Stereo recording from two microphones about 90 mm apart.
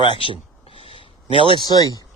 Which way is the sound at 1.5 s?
50° left (ahead or behind).